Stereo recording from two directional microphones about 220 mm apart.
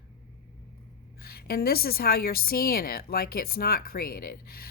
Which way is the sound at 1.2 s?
45° left (ahead or behind).